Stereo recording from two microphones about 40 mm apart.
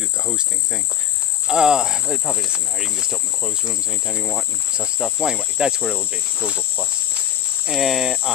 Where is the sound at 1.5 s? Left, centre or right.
Centre.